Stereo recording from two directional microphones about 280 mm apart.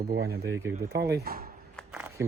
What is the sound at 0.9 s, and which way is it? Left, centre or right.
Speech, right.